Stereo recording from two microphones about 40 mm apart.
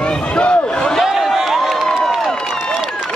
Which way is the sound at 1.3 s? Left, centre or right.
Centre.